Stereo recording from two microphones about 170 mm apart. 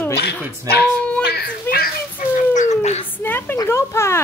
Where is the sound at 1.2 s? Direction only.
65° left (ahead or behind); by 3.1 s 40° left (ahead or behind).